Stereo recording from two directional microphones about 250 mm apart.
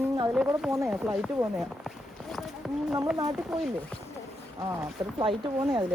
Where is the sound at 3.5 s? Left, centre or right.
Centre.